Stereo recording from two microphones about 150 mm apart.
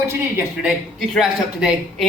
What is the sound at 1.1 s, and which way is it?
Speech, centre (ahead or behind).